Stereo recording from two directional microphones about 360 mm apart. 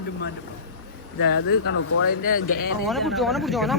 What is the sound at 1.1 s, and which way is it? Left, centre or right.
Speech, left.